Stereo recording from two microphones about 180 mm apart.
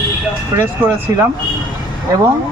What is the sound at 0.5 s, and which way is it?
Speech, 15° right (ahead or behind).